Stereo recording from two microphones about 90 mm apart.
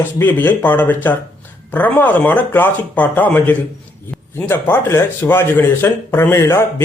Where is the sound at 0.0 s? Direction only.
20° left (ahead or behind).